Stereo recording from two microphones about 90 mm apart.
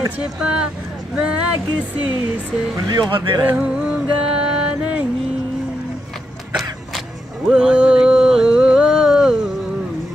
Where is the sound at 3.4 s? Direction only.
15° right (ahead or behind).